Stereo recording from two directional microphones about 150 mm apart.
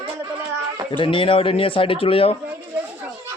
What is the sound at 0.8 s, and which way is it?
Speech, 35° left (ahead or behind).